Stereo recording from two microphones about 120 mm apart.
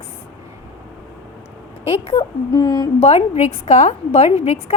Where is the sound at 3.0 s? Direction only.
65° left (ahead or behind).